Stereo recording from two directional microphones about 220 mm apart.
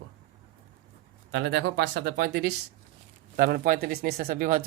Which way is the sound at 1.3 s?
55° right (ahead or behind).